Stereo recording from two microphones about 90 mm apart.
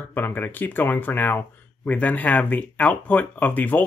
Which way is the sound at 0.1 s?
20° left (ahead or behind).